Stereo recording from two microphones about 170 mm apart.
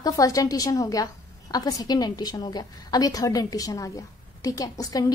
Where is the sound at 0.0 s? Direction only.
20° left (ahead or behind).